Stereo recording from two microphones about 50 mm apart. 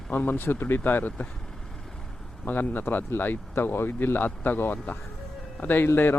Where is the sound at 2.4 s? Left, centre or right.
Left.